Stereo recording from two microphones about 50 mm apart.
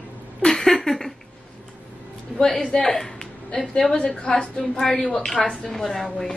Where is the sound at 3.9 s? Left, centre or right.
Left.